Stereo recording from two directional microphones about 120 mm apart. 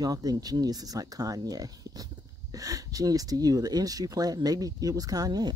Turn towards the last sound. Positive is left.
turn(degrees=-35)  # may be behind; listen again after turning